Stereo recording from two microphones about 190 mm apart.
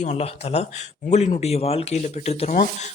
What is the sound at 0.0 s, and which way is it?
Speech, 35° left (ahead or behind).